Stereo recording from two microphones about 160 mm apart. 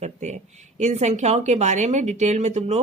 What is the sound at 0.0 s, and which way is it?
Speech, 45° right (ahead or behind).